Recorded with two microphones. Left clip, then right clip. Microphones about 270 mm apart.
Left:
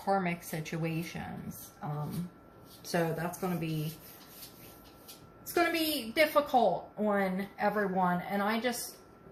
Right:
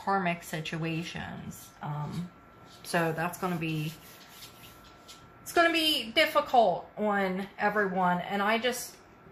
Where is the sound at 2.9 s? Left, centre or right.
Right.